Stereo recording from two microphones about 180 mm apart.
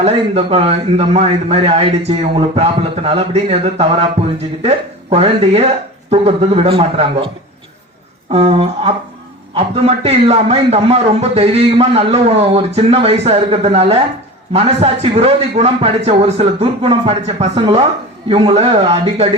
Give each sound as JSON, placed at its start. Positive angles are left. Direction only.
{"t": 0.0, "sound": "a man's voice", "side_deg": -35}
{"t": 8.3, "sound": "a man's voice", "side_deg": -35}